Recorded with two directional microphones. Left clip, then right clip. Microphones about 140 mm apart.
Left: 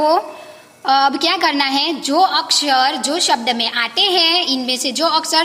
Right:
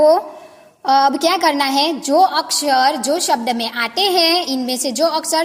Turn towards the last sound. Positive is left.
turn(degrees=-50)  # may be behind; listen again after turning